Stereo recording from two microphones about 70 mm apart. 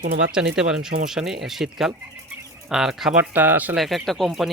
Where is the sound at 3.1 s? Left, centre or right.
Right.